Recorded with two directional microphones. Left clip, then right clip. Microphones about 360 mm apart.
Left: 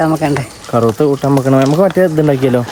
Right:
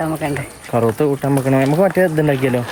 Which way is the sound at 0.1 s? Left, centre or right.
Centre.